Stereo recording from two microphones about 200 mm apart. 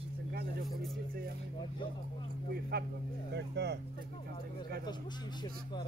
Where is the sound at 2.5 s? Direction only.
50° right (ahead or behind).